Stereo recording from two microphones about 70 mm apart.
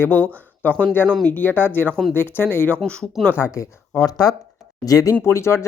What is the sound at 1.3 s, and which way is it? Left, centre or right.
Speech, left.